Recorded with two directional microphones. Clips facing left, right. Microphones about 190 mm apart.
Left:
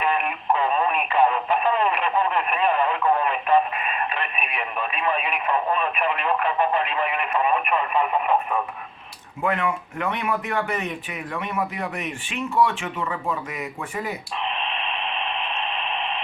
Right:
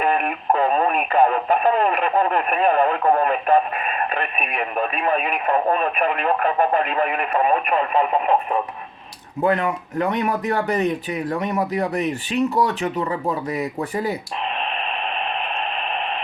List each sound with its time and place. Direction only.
0.0 s speech: 45° right (ahead or behind)
9.4 s speech: 35° right (ahead or behind)